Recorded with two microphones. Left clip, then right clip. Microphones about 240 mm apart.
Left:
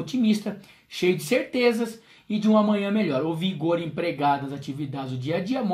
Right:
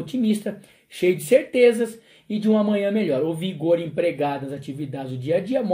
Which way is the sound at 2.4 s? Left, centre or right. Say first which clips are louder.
Right 1 dB; centre.